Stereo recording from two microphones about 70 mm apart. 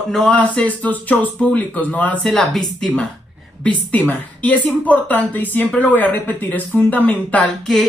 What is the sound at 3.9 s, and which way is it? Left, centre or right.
Speech, left.